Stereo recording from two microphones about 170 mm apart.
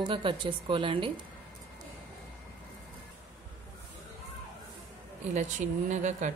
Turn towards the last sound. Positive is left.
turn(degrees=-45)  # may be behind; listen again after turning